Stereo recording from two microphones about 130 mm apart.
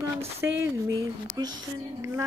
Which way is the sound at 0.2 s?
20° right (ahead or behind).